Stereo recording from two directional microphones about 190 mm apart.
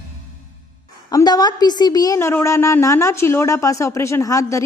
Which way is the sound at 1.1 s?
20° left (ahead or behind).